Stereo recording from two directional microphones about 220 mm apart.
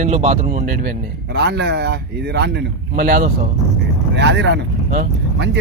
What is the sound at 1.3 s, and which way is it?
Speech, 50° right (ahead or behind).